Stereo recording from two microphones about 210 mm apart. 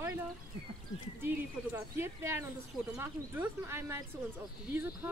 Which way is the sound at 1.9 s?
10° right (ahead or behind).